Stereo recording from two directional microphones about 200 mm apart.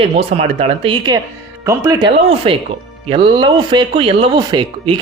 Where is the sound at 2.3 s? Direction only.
25° right (ahead or behind).